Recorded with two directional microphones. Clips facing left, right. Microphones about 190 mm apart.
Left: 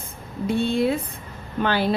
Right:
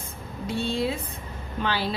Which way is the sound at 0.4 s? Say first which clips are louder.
Left 6 dB; 55° left (ahead or behind).